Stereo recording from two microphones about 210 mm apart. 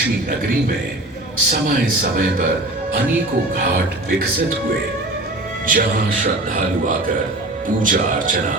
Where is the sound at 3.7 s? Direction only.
45° right (ahead or behind).